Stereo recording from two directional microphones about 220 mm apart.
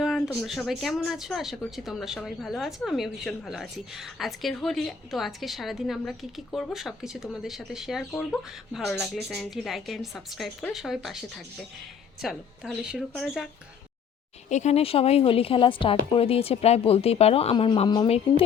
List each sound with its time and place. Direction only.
0.0 s speech: centre (ahead or behind)
14.5 s a woman's voice: 30° left (ahead or behind)